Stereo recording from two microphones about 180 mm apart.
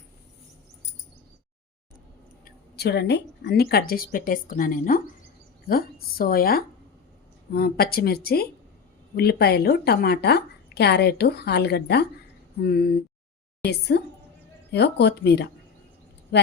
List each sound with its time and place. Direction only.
2.4 s a woman's voice: 65° left (ahead or behind)